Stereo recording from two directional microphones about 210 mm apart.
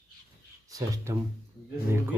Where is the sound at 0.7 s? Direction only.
15° right (ahead or behind).